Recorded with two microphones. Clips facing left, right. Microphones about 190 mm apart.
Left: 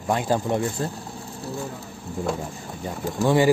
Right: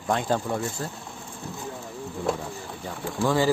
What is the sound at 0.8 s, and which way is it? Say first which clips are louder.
Speech: left 5 dB; 30° left (ahead or behind).